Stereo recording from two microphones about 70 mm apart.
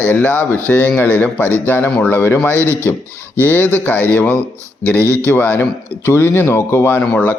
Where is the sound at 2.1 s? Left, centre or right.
Left.